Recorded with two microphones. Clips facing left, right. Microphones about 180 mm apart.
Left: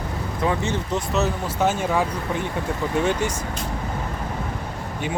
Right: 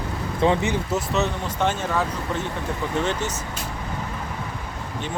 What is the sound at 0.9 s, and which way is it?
Speech, centre (ahead or behind).